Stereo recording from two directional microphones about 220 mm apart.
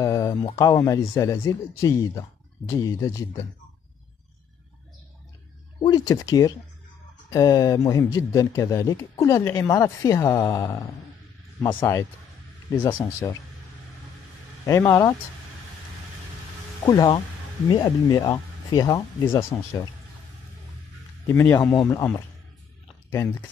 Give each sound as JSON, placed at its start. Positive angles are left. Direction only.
{"t": 0.0, "sound": "speech", "side_deg": 15}
{"t": 5.8, "sound": "speech", "side_deg": 15}
{"t": 11.8, "sound": "speech", "side_deg": 10}
{"t": 14.7, "sound": "speech", "side_deg": 15}
{"t": 16.8, "sound": "speech", "side_deg": 15}
{"t": 21.3, "sound": "speech", "side_deg": 10}